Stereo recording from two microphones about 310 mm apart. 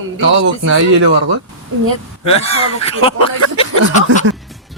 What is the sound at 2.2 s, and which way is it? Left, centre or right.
Speech, centre.